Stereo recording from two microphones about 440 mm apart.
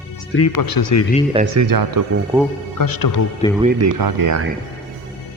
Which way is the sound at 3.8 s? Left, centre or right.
Right.